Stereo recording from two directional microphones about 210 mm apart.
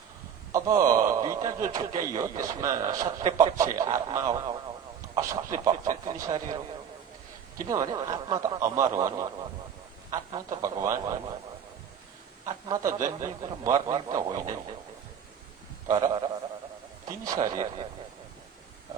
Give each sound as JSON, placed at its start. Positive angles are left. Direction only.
{"t": 0.5, "sound": "a man's voice", "side_deg": -15}
{"t": 7.7, "sound": "a man's voice", "side_deg": -15}
{"t": 12.5, "sound": "a man's voice", "side_deg": -15}
{"t": 15.9, "sound": "a man's voice", "side_deg": -15}